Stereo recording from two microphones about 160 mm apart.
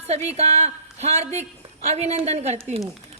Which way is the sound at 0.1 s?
40° right (ahead or behind).